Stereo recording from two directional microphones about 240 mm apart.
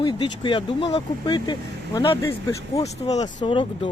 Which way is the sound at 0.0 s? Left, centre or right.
Centre.